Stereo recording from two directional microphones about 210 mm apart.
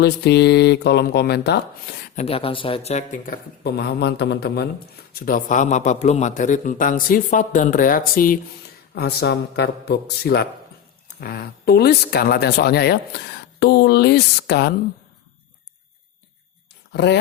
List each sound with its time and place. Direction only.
0.0 s speech: 50° left (ahead or behind)
2.1 s a man's voice: 25° left (ahead or behind); by 4.7 s 50° left (ahead or behind)
5.2 s a man's voice: 40° left (ahead or behind)
16.9 s speech: 50° left (ahead or behind)